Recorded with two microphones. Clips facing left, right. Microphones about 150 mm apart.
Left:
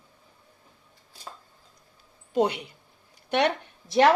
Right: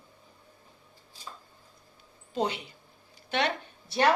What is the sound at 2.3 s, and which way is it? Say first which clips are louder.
A woman's voice: left 6 dB; 60° left (ahead or behind).